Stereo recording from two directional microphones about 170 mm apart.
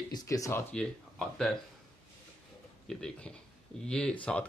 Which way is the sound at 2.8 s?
5° left (ahead or behind).